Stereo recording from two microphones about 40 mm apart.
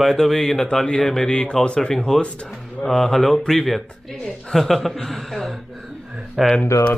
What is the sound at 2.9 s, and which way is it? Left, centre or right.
Speech, centre.